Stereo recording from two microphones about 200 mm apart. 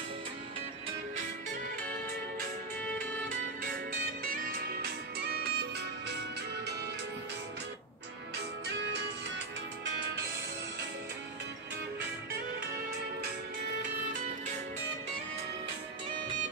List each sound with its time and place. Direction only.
2.9 s music: 10° left (ahead or behind)
4.2 s music: 45° right (ahead or behind)